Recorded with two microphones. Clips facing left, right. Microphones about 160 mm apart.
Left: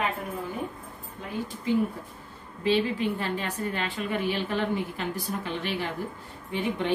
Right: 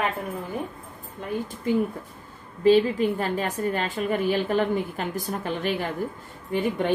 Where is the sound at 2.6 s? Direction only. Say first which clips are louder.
Right 6 dB; 45° right (ahead or behind).